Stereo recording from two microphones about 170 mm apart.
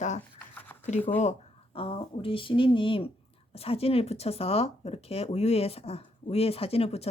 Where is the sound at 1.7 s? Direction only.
35° left (ahead or behind).